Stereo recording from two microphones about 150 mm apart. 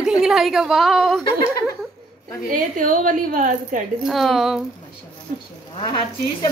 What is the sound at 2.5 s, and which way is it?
A woman's voice, 60° right (ahead or behind).